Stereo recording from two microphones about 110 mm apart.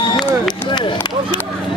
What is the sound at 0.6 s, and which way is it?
Speech, 45° left (ahead or behind).